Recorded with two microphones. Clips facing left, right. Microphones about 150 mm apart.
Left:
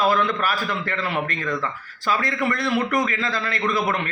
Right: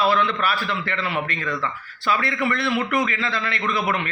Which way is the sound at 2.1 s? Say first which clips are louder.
Even; 40° left (ahead or behind).